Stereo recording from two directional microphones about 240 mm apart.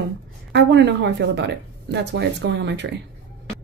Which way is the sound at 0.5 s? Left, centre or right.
Right.